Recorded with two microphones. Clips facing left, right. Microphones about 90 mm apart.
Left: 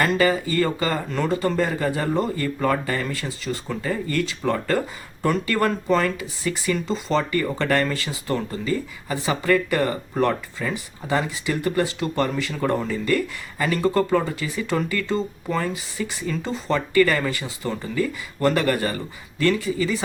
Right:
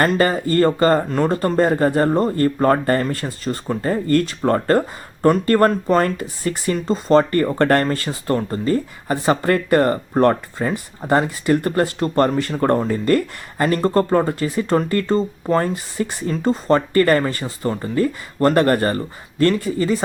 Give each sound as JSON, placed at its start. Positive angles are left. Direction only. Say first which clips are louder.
{"t": 0.0, "sound": "speech", "louder": "right 3 dB", "side_deg": -50}